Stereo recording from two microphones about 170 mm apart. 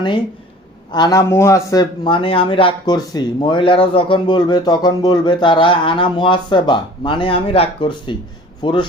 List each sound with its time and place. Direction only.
0.9 s speech: 25° left (ahead or behind)